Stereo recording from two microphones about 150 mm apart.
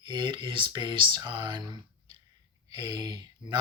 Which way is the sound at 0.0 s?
30° right (ahead or behind).